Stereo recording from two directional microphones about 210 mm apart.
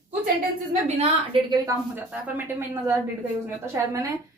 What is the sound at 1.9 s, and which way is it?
Speech, 10° right (ahead or behind).